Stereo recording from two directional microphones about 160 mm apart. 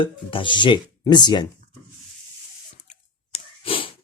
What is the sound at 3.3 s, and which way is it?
Sneeze, 35° left (ahead or behind).